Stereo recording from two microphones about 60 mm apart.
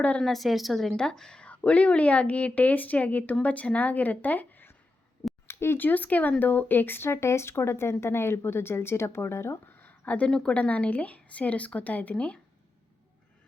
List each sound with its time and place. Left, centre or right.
0.2 s a woman's voice: centre; by 4.7 s left
5.5 s a sound: left
5.8 s a woman's voice: left
10.1 s a woman's voice: left